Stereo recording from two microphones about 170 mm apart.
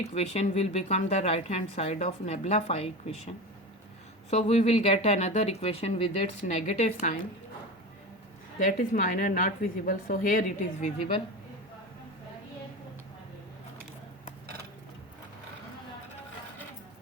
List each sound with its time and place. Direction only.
0.1 s a woman's voice: 40° left (ahead or behind)
4.3 s a woman's voice: 40° left (ahead or behind)
8.5 s a woman's voice: 50° left (ahead or behind)